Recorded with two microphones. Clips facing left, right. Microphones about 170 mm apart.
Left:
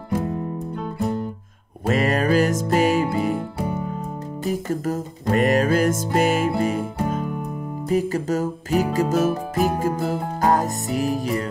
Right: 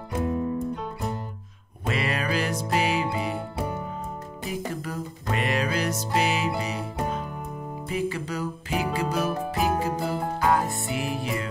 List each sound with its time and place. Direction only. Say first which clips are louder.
1.9 s music: left 8 dB; 45° left (ahead or behind)
4.5 s music: left 8 dB; 45° left (ahead or behind)